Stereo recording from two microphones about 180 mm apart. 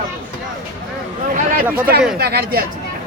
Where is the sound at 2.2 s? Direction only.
60° right (ahead or behind).